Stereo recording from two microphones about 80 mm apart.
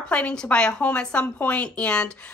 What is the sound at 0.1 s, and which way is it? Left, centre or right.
Speech, centre.